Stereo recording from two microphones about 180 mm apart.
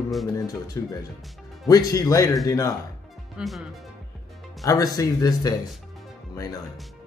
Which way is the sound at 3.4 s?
Centre (ahead or behind).